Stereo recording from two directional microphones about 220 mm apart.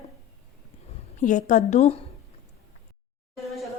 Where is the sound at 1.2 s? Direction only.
35° left (ahead or behind).